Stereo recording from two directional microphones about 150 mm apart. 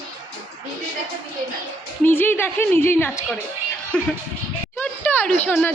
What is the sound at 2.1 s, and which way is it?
A woman's voice, 15° left (ahead or behind).